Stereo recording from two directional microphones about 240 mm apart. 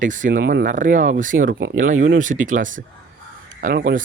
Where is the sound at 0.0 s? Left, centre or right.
Right.